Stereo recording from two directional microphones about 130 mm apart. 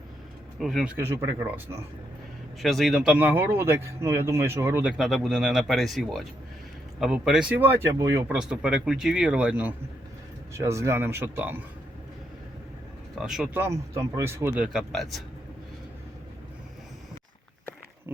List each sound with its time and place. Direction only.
0.6 s speech: centre (ahead or behind)
0.9 s speech: 20° right (ahead or behind)
2.6 s speech: centre (ahead or behind)
3.2 s speech: 15° right (ahead or behind)
8.3 s speech: 5° right (ahead or behind)
10.5 s speech: 20° right (ahead or behind)
13.1 s speech: 5° right (ahead or behind)
13.5 s speech: 20° right (ahead or behind)
14.5 s speech: 5° right (ahead or behind)